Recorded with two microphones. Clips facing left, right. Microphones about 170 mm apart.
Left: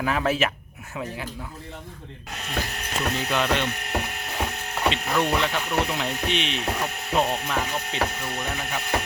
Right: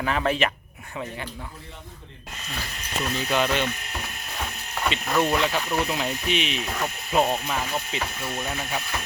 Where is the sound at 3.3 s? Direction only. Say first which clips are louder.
Right 2 dB; 5° right (ahead or behind).